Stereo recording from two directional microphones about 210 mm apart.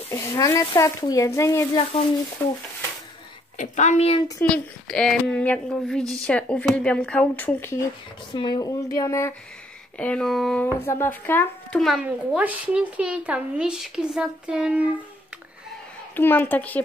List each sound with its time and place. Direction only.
0.1 s speech: 15° left (ahead or behind)
3.5 s a woman's voice: 35° left (ahead or behind)
4.4 s speech: 5° left (ahead or behind)
8.3 s speech: 20° left (ahead or behind); by 14.9 s 5° right (ahead or behind)
16.2 s speech: 10° left (ahead or behind)